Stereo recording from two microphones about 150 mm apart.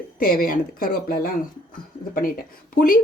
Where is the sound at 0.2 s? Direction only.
75° left (ahead or behind).